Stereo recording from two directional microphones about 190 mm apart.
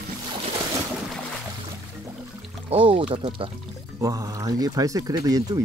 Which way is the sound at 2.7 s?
30° right (ahead or behind).